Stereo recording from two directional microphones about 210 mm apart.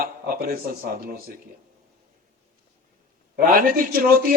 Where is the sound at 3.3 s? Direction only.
40° right (ahead or behind).